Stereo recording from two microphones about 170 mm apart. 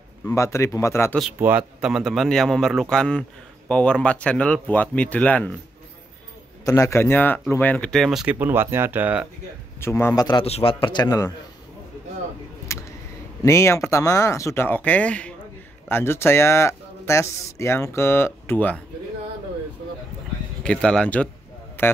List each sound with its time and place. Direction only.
0.2 s speech: 15° left (ahead or behind)
1.4 s speech: 10° right (ahead or behind); by 5.6 s 10° left (ahead or behind)
6.6 s speech: 20° left (ahead or behind); by 9.3 s 10° right (ahead or behind)
9.8 s speech: 15° left (ahead or behind)
10.2 s a man's voice: 30° left (ahead or behind)
12.7 s a sound: 15° left (ahead or behind)
13.4 s speech: 15° left (ahead or behind)
20.6 s speech: 5° left (ahead or behind)